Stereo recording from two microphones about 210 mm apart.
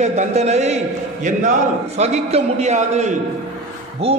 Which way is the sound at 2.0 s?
30° right (ahead or behind).